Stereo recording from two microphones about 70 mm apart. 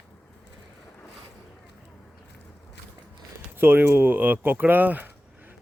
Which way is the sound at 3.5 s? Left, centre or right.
Right.